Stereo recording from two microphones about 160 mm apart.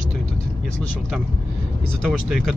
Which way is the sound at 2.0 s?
5° right (ahead or behind).